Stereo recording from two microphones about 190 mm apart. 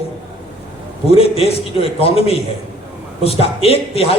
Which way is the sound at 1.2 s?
30° left (ahead or behind).